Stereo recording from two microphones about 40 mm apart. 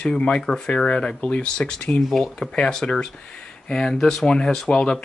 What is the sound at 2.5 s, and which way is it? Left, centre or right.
Speech, centre.